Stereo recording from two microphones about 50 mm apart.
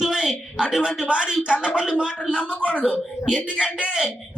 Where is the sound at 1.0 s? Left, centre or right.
Centre.